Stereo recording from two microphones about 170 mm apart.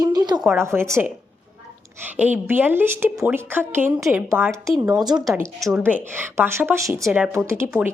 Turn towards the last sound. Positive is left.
turn(degrees=-15)  # may be behind; listen again after turning